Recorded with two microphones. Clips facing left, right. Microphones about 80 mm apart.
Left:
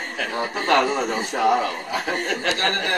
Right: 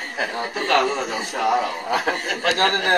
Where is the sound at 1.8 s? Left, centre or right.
Right.